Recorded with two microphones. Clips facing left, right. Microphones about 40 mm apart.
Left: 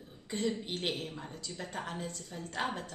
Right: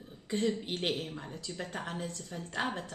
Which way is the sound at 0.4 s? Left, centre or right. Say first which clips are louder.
Right 2 dB; centre.